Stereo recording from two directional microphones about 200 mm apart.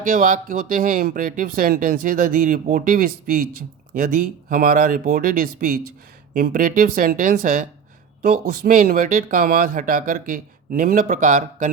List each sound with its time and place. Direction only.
0.1 s speech: 45° right (ahead or behind)